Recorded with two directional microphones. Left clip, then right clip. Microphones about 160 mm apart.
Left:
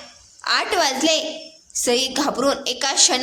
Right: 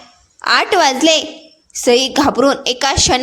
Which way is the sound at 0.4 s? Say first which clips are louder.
Right 7 dB; 45° right (ahead or behind).